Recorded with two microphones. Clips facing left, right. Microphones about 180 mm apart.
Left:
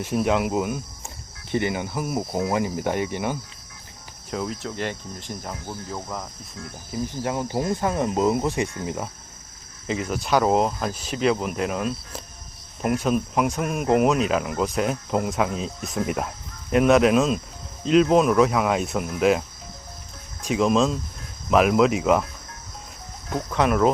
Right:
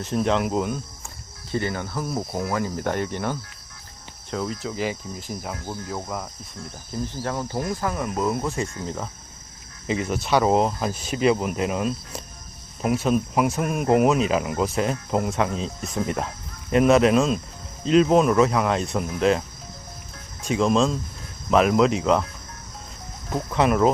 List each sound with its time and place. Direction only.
0.0 s cricket: 10° left (ahead or behind)
1.5 s cricket: 15° left (ahead or behind)
4.3 s speech: centre (ahead or behind)
6.9 s speech: 15° left (ahead or behind)
8.8 s cricket: 10° left (ahead or behind)
9.8 s speech: centre (ahead or behind)
23.3 s speech: centre (ahead or behind)